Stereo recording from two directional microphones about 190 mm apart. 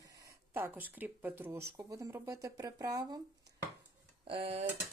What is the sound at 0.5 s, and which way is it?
Speech, 10° right (ahead or behind).